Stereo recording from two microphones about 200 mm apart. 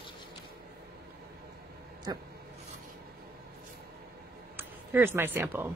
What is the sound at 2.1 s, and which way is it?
Speech, 20° right (ahead or behind).